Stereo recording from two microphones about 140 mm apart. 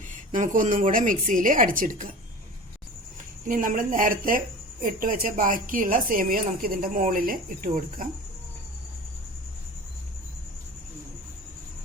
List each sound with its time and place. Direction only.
0.3 s a woman's voice: 65° right (ahead or behind)
3.4 s a woman's voice: 75° right (ahead or behind)